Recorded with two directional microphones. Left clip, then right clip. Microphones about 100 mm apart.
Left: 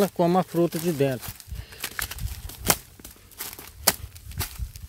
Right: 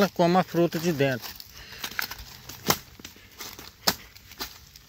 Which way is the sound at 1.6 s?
90° left.